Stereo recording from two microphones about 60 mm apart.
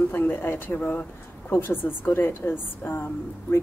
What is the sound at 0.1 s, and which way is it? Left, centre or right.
A woman's voice, left.